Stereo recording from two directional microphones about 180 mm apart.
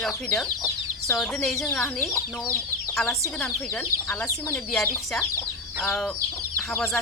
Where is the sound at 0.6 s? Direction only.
15° left (ahead or behind).